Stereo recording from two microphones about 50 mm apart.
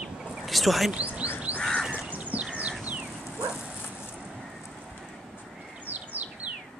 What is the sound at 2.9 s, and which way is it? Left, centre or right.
Dog, right.